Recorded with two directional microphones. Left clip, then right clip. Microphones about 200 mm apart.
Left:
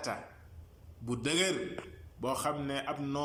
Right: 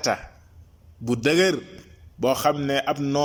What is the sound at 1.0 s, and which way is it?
A man's voice, 40° right (ahead or behind).